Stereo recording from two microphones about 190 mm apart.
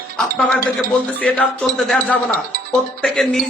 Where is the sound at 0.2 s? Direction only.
5° left (ahead or behind).